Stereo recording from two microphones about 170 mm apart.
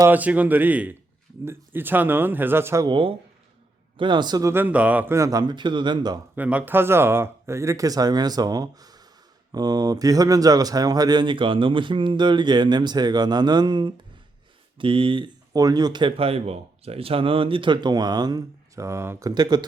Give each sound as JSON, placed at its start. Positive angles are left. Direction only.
{"t": 0.0, "sound": "speech", "side_deg": -10}
{"t": 2.8, "sound": "speech", "side_deg": -30}
{"t": 6.3, "sound": "speech", "side_deg": -10}